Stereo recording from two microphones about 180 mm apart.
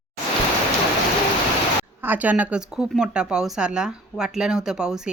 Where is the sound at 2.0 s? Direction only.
10° right (ahead or behind).